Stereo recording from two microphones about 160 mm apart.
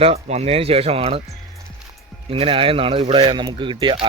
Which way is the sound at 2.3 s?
35° right (ahead or behind).